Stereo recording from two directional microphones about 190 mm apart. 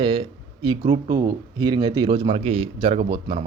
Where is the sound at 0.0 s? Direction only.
30° right (ahead or behind).